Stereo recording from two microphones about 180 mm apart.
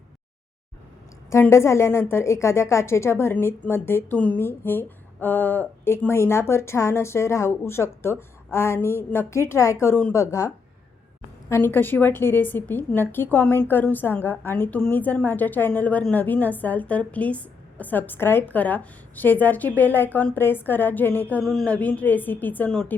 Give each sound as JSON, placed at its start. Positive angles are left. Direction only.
{"t": 1.3, "sound": "a woman's voice", "side_deg": 15}